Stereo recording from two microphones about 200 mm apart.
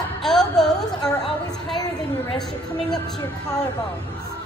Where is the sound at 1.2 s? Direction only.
Centre (ahead or behind).